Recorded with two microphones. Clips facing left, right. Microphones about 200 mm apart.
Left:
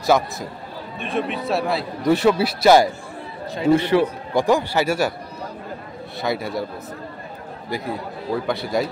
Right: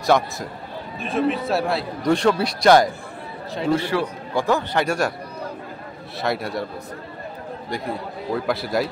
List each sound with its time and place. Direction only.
0.0 s a man's voice: centre (ahead or behind)
3.7 s a man's voice: 20° left (ahead or behind); by 5.1 s 5° left (ahead or behind)
6.1 s a man's voice: centre (ahead or behind)
8.4 s a man's voice: centre (ahead or behind)